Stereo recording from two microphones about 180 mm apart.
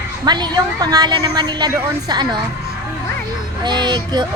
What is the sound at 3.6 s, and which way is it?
Speech, 25° right (ahead or behind).